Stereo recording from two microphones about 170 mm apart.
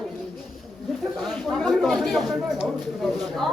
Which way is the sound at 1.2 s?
Centre (ahead or behind).